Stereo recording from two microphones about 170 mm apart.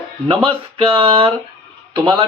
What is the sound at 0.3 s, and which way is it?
Speech, 30° right (ahead or behind).